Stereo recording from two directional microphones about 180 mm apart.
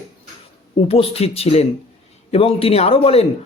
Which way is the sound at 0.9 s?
35° left (ahead or behind).